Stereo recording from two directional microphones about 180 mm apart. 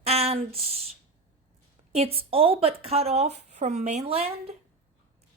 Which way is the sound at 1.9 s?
35° right (ahead or behind).